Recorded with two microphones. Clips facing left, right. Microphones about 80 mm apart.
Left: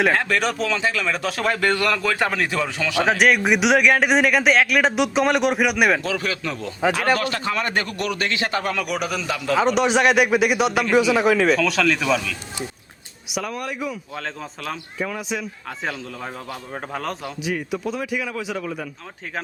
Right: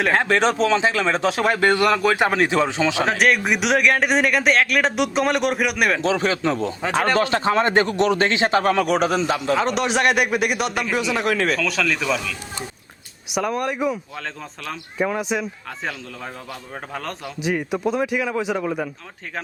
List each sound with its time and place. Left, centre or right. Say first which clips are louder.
0.1 s a man's voice: right 3 dB; right
3.1 s speech: left 5 dB; centre
6.0 s a man's voice: right 5 dB; right
9.6 s speech: left 2 dB; centre
13.6 s speech: right 5 dB; right
14.9 s a man's voice: right 6 dB; right
16.9 s speech: left 2 dB; centre
17.4 s a man's voice: right 4 dB; right